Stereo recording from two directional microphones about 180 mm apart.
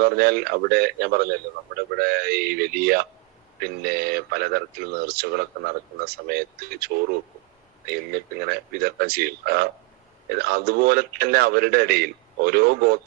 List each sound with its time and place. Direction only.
0.0 s a man's voice: 55° right (ahead or behind)